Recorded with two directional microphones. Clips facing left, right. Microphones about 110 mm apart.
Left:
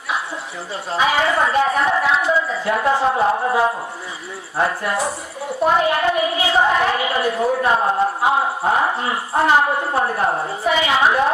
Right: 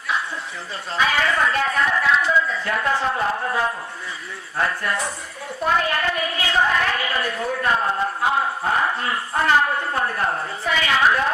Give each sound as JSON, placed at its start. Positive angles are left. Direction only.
{"t": 0.9, "sound": "a woman's voice", "side_deg": 20}